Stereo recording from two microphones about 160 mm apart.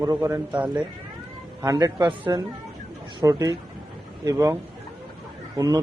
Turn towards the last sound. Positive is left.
turn(degrees=-20)  # may be behind; listen again after turning